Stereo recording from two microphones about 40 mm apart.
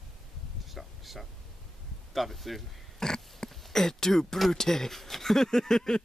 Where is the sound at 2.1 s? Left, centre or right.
Centre.